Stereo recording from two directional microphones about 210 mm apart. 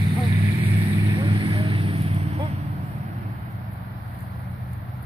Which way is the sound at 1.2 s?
25° right (ahead or behind).